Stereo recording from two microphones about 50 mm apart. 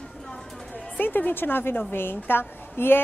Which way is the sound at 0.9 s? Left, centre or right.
Left.